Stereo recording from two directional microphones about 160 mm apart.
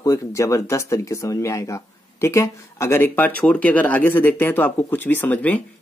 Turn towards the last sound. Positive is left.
turn(degrees=10)  # may be behind; listen again after turning